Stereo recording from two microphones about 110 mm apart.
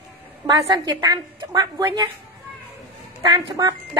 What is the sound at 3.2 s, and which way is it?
Speech, 35° right (ahead or behind).